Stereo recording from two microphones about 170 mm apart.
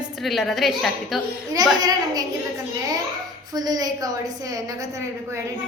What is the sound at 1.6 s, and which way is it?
Speech, 20° right (ahead or behind).